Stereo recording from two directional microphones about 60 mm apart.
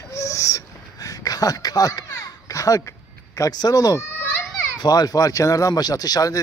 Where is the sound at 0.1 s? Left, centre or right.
Left.